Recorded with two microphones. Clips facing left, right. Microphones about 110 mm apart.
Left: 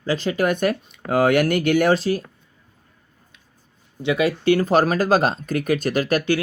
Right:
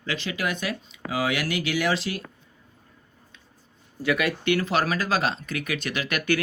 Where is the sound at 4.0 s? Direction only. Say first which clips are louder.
Left 5 dB; 25° left (ahead or behind).